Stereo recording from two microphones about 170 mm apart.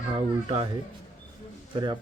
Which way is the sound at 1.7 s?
25° right (ahead or behind).